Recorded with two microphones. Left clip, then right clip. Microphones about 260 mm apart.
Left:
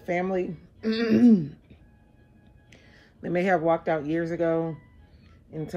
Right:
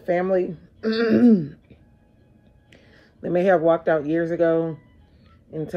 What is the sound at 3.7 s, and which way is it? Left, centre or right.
Speech, right.